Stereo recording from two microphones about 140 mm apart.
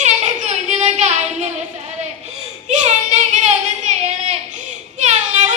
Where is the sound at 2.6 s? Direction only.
60° right (ahead or behind).